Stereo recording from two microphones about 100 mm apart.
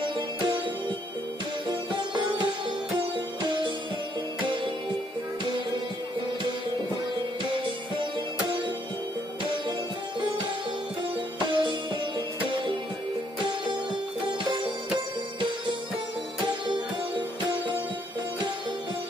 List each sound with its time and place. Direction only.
0.0 s music: 55° right (ahead or behind)
8.0 s music: 55° right (ahead or behind)
11.3 s music: 55° right (ahead or behind)